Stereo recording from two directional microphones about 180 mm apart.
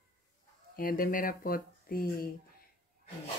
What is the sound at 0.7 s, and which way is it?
Speech, 55° left (ahead or behind).